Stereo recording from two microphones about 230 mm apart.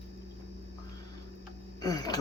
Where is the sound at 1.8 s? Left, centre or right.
Centre.